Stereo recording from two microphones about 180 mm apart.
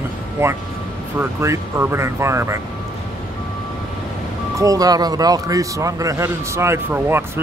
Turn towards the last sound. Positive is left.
turn(degrees=-15)  # may be behind; listen again after turning